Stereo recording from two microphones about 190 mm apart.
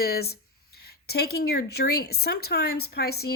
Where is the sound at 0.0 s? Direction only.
55° left (ahead or behind).